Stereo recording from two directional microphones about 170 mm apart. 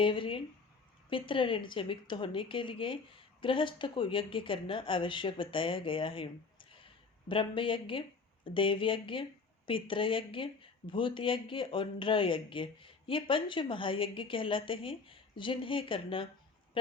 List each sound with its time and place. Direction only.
0.0 s a woman's voice: 30° left (ahead or behind)